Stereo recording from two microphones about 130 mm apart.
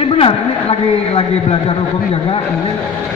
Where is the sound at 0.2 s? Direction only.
45° left (ahead or behind).